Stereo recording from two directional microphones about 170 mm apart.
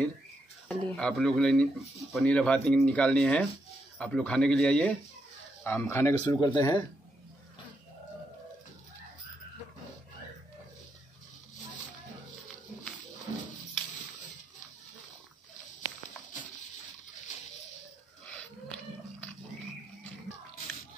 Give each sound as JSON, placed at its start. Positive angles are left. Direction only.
{"t": 0.7, "sound": "speech", "side_deg": 5}